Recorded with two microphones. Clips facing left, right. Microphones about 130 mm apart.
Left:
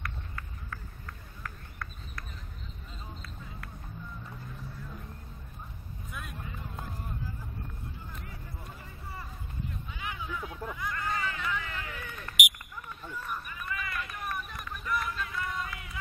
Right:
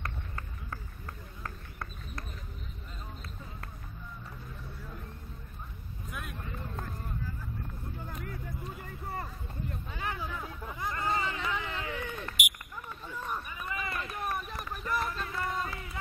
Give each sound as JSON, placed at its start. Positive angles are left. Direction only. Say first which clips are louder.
{"t": 0.0, "sound": "run", "louder": "right 1 dB", "side_deg": -30}
{"t": 8.1, "sound": "music", "louder": "right 5 dB", "side_deg": -50}
{"t": 8.8, "sound": "hubbub", "louder": "right 6 dB", "side_deg": -55}
{"t": 10.8, "sound": "a sound", "louder": "right 3 dB", "side_deg": -25}